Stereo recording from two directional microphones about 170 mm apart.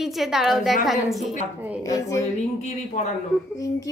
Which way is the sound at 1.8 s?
20° left (ahead or behind).